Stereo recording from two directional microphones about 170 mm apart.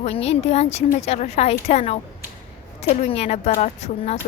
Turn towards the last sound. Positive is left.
turn(degrees=40)  # may be behind; listen again after turning